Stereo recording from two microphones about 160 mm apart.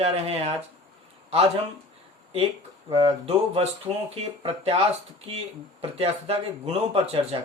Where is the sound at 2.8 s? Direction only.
40° right (ahead or behind).